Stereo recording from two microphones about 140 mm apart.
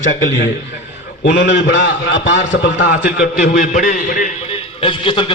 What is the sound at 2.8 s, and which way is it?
A man's voice, 70° left (ahead or behind).